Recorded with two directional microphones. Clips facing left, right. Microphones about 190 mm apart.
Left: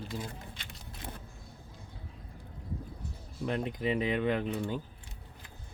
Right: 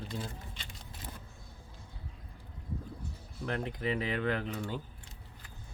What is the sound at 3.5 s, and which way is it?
Speech, 20° left (ahead or behind).